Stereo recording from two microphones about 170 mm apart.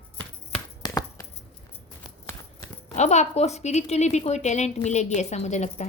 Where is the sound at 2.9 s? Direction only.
40° left (ahead or behind).